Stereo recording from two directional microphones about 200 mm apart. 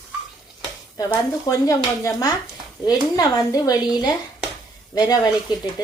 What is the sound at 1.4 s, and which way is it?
A woman's voice, 15° left (ahead or behind).